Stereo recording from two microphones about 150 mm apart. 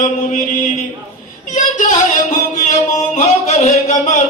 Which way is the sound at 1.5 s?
55° left (ahead or behind).